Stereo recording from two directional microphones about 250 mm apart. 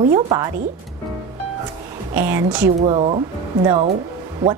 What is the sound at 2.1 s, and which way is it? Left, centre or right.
Speech, centre.